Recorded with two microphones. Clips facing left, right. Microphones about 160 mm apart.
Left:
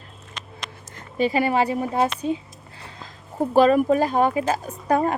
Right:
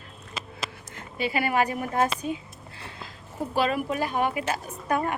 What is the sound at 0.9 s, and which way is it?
Speech, 40° left (ahead or behind).